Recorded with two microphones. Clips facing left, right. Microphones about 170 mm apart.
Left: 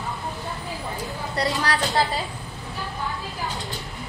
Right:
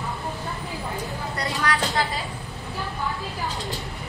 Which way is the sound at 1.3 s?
35° left (ahead or behind).